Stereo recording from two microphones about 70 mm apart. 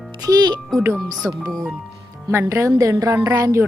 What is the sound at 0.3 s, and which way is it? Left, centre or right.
A woman's voice, right.